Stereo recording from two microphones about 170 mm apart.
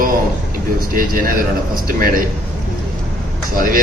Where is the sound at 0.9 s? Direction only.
55° right (ahead or behind).